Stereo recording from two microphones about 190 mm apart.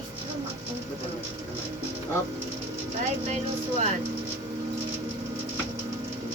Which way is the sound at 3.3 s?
35° right (ahead or behind).